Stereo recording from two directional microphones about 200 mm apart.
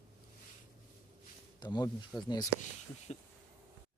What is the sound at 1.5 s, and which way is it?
Speech, 20° left (ahead or behind).